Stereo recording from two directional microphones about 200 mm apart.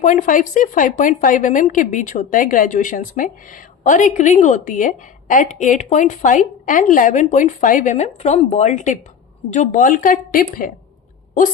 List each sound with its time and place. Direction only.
0.0 s a woman's voice: 40° left (ahead or behind)